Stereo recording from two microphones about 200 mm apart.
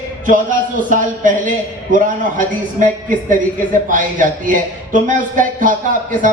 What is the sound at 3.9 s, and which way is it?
Speech, 40° right (ahead or behind).